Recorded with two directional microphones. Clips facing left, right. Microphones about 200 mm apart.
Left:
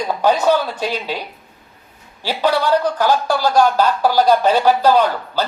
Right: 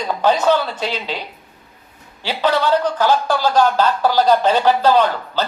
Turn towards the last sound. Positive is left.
turn(degrees=10)  # may be behind; listen again after turning